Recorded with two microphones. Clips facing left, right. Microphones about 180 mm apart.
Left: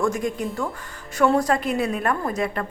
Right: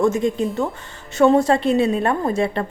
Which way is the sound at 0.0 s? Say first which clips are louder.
Right 5 dB; 25° right (ahead or behind).